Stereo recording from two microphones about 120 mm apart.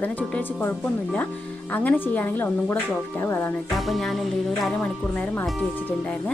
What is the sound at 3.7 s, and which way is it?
Speech, centre (ahead or behind).